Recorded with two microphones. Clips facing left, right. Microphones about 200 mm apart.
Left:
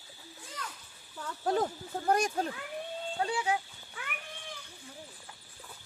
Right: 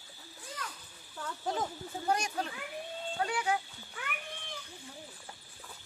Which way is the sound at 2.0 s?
50° left (ahead or behind).